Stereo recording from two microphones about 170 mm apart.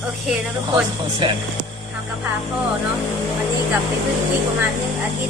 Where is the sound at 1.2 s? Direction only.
30° right (ahead or behind).